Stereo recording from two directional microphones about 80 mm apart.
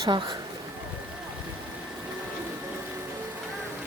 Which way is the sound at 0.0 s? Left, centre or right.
Right.